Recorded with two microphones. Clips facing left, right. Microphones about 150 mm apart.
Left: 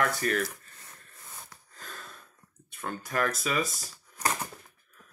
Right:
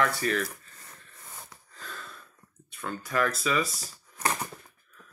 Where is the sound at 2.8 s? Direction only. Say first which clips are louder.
Right 2 dB; 45° left (ahead or behind).